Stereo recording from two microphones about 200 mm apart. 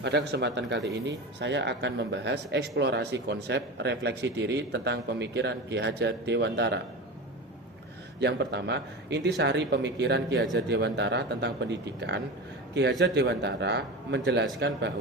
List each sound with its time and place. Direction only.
0.0 s speech: 60° right (ahead or behind)
8.2 s speech: 55° right (ahead or behind)